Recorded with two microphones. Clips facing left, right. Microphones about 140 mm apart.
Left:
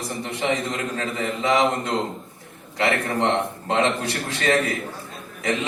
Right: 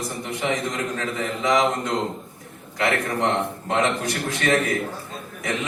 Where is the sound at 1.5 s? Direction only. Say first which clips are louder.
Even; 25° left (ahead or behind).